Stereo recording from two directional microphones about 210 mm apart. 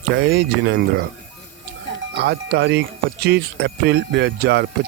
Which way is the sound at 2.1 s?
50° right (ahead or behind).